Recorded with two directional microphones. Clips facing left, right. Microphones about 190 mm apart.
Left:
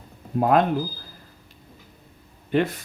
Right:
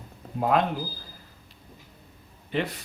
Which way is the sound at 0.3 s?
50° left (ahead or behind).